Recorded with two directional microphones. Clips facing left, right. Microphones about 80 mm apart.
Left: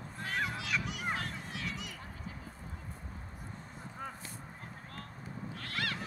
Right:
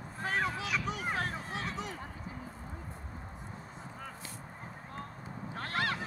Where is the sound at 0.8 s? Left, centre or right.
Right.